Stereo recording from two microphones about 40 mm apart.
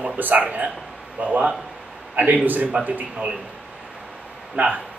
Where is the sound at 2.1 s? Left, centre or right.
Right.